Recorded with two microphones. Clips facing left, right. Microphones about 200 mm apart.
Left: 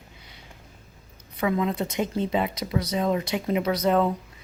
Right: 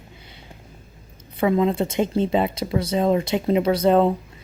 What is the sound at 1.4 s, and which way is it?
Speech, 30° right (ahead or behind).